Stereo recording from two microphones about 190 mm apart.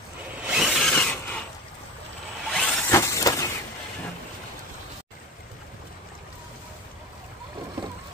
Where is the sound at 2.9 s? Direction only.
15° left (ahead or behind).